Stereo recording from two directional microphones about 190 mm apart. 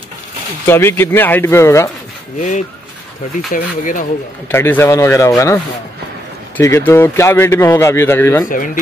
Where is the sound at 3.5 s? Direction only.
45° left (ahead or behind).